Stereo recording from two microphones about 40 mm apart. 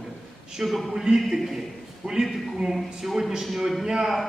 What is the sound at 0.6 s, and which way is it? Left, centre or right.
Speech, centre.